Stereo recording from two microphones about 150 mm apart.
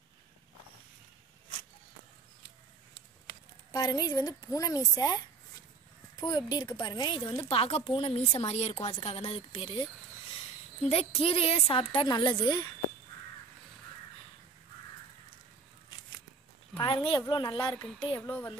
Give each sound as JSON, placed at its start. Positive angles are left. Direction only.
{"t": 3.7, "sound": "a woman's voice", "side_deg": 25}
{"t": 16.8, "sound": "a woman's voice", "side_deg": 35}
{"t": 18.2, "sound": "speech", "side_deg": 10}